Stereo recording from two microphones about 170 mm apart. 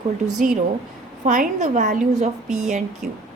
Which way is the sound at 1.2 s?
45° right (ahead or behind).